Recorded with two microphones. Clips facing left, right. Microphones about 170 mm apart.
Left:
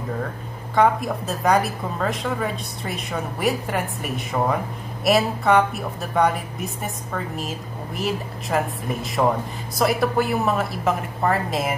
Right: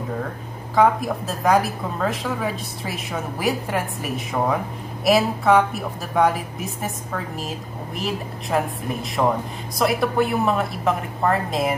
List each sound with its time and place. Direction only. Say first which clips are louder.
0.7 s a woman's voice: right 1 dB; centre (ahead or behind)